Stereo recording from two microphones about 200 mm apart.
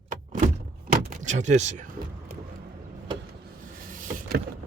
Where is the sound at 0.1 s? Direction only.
40° right (ahead or behind).